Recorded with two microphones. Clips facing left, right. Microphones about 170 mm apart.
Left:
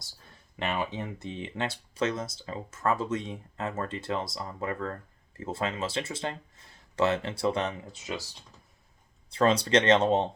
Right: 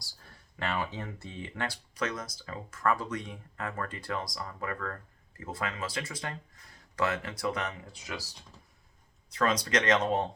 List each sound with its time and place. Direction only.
0.0 s speech: 20° left (ahead or behind)
9.3 s speech: 30° left (ahead or behind)